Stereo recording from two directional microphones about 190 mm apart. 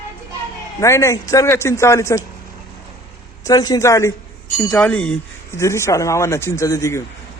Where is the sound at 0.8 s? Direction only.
15° left (ahead or behind).